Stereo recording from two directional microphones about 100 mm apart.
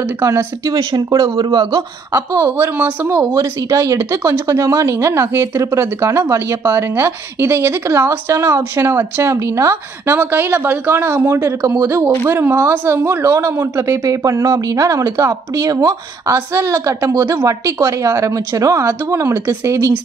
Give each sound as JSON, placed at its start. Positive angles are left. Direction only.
{"t": 0.2, "sound": "speech", "side_deg": -25}
{"t": 0.7, "sound": "speech", "side_deg": -40}
{"t": 1.4, "sound": "speech", "side_deg": -55}
{"t": 2.1, "sound": "speech", "side_deg": -30}